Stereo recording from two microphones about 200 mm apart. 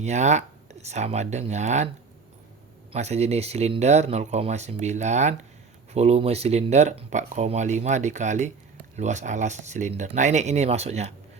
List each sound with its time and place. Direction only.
0.0 s speech: 35° right (ahead or behind)
2.9 s speech: 35° right (ahead or behind)